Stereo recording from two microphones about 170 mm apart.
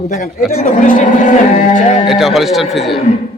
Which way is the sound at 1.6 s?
45° left (ahead or behind).